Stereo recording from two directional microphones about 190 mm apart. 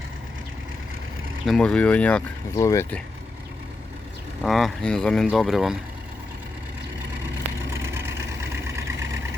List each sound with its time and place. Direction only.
1.5 s speech: 5° left (ahead or behind)
2.6 s speech: 15° left (ahead or behind)
4.4 s speech: centre (ahead or behind)
7.9 s vehicle: 15° right (ahead or behind)